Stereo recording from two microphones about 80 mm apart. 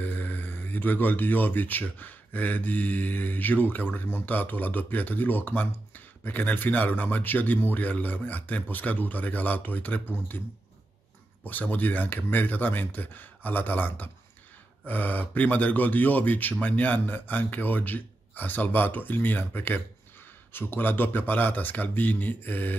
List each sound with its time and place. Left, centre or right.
0.0 s speech: left
11.4 s speech: left